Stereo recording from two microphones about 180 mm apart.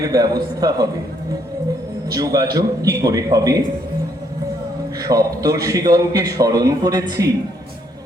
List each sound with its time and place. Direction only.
0.0 s a man's voice: 20° right (ahead or behind)
2.1 s a man's voice: 20° right (ahead or behind)
5.0 s a man's voice: 20° right (ahead or behind)